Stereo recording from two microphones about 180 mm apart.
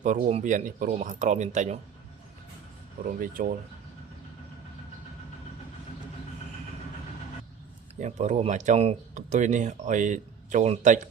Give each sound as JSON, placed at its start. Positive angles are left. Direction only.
{"t": 0.0, "sound": "speech", "side_deg": -40}
{"t": 3.0, "sound": "speech", "side_deg": -50}
{"t": 7.9, "sound": "speech", "side_deg": -40}